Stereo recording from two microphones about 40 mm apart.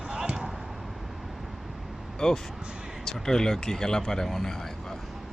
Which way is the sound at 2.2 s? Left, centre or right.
Centre.